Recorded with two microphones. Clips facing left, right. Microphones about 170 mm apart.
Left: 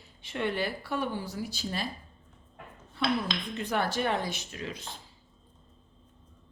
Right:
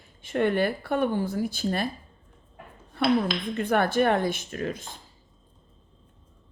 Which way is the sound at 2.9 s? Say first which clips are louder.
Right 6 dB; 55° right (ahead or behind).